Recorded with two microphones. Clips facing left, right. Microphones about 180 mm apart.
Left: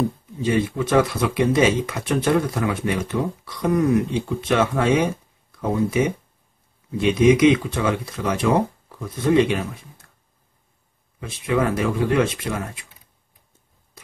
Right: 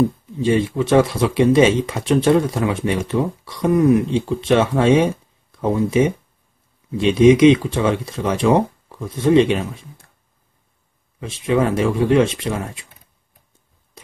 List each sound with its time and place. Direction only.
0.4 s speech: 25° right (ahead or behind)
11.1 s speech: 25° right (ahead or behind)